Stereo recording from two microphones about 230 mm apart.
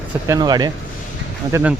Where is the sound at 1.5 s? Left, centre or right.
Centre.